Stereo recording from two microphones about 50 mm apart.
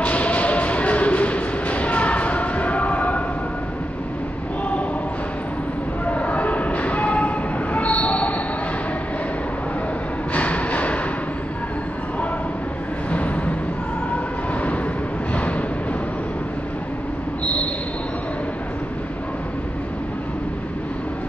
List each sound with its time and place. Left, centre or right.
0.0 s music: left
6.0 s train: left
10.3 s music: left